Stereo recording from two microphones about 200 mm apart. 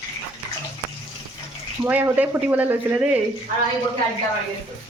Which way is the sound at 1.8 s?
10° right (ahead or behind).